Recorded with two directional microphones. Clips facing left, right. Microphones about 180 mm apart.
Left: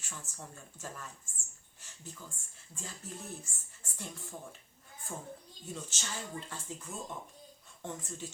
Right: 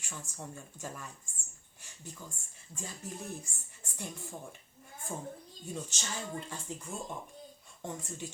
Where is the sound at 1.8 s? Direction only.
15° right (ahead or behind).